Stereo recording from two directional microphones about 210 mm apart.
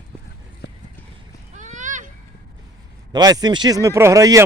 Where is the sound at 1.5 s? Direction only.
35° right (ahead or behind).